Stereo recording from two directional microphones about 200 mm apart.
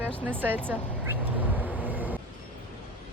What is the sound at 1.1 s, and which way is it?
Vehicle, 10° right (ahead or behind).